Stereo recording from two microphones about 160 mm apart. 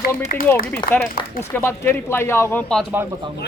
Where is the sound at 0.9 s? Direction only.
80° left.